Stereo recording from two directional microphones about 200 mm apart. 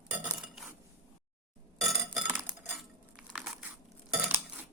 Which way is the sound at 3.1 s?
5° right (ahead or behind).